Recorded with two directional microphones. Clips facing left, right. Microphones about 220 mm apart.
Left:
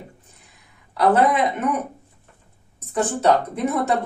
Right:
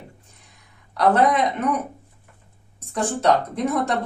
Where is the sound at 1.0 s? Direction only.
5° left (ahead or behind).